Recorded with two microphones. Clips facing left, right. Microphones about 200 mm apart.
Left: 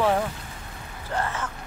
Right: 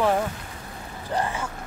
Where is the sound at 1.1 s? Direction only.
15° right (ahead or behind).